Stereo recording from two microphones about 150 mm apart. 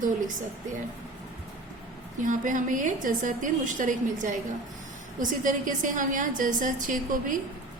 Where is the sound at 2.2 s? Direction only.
60° right (ahead or behind).